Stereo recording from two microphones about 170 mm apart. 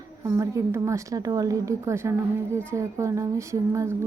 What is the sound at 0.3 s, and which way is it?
A woman's voice, 20° right (ahead or behind).